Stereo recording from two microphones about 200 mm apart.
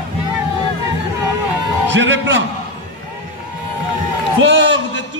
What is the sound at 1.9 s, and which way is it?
Music, 65° right (ahead or behind).